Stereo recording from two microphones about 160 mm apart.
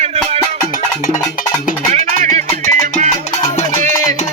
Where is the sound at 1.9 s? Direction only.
50° right (ahead or behind).